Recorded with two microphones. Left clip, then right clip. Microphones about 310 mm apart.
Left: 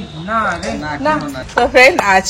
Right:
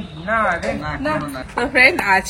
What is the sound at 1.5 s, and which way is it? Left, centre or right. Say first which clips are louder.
Speech: left 5 dB; centre.